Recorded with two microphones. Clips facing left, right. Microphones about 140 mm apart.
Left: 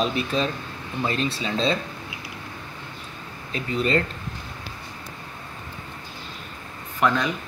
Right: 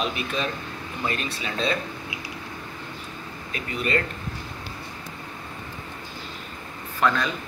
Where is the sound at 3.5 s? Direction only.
30° left (ahead or behind).